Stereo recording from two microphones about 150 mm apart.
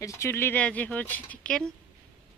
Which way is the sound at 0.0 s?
20° left (ahead or behind).